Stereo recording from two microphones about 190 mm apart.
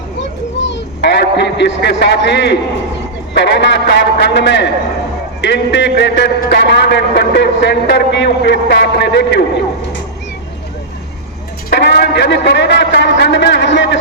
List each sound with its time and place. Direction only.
0.6 s a man's voice: 65° left (ahead or behind)
11.7 s a man's voice: 60° left (ahead or behind)